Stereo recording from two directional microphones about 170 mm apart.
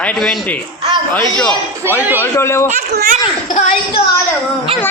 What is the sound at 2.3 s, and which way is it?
Speech, 15° left (ahead or behind).